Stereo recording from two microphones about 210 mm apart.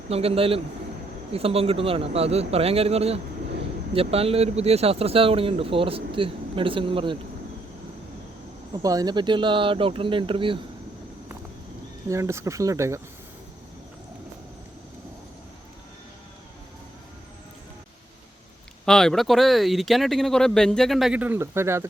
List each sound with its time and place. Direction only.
0.1 s speech: 30° right (ahead or behind)
8.7 s speech: 15° right (ahead or behind)
12.0 s speech: 15° right (ahead or behind)
18.9 s speech: centre (ahead or behind)